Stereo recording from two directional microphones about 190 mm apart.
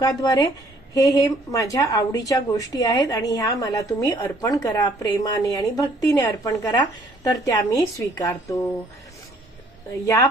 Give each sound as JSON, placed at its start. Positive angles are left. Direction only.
{"t": 0.0, "sound": "a woman's voice", "side_deg": 20}